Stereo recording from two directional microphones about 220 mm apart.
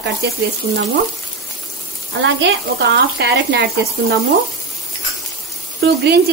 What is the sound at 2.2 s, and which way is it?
Speech, 55° right (ahead or behind).